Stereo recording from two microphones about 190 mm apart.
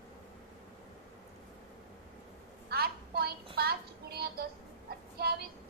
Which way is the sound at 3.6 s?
55° right (ahead or behind).